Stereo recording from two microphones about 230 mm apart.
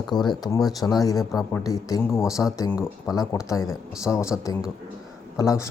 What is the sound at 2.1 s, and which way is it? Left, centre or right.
Speech, centre.